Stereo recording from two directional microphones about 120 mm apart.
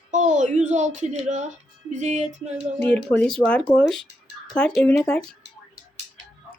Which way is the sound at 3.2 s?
5° left (ahead or behind).